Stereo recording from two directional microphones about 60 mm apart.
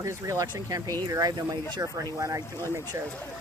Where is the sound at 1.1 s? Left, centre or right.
Right.